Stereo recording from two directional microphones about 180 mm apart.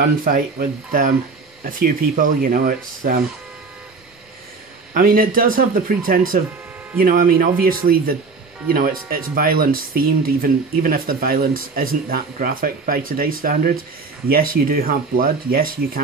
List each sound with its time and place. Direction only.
0.2 s speech: 50° right (ahead or behind)
4.9 s speech: 50° right (ahead or behind)